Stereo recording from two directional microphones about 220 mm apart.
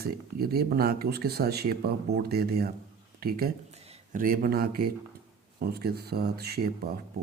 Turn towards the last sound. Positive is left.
turn(degrees=-45)  # may be behind; listen again after turning